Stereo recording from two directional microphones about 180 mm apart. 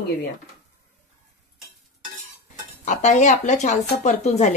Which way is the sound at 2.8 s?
40° left (ahead or behind).